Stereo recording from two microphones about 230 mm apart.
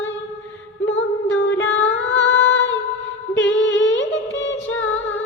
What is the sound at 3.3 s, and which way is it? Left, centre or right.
Humming, left.